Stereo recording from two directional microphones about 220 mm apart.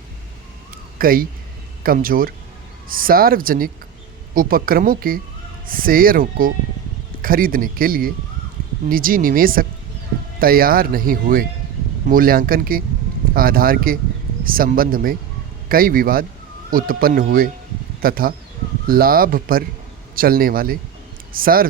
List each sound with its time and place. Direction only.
0.9 s speech: 40° right (ahead or behind)